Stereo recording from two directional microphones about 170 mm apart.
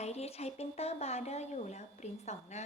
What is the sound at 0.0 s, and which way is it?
A woman's voice, 40° left (ahead or behind).